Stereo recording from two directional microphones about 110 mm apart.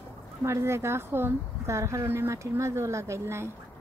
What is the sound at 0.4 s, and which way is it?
A woman's voice, 25° right (ahead or behind).